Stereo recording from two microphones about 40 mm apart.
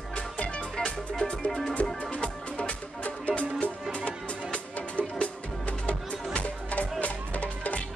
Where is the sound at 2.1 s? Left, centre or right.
Left.